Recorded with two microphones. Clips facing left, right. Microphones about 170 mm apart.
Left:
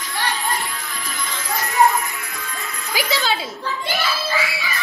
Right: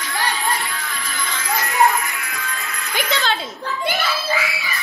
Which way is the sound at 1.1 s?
75° right (ahead or behind).